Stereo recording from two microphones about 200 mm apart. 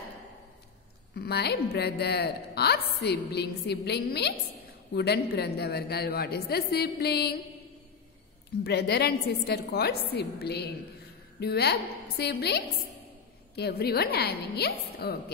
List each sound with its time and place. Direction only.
1.1 s a woman's voice: 55° left (ahead or behind)
8.6 s a woman's voice: 55° left (ahead or behind)